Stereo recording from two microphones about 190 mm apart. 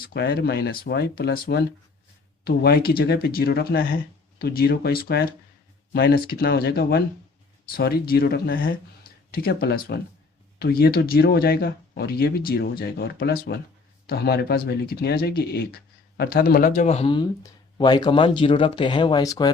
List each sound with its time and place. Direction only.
0.0 s speech: 55° left (ahead or behind); by 19.5 s 20° left (ahead or behind)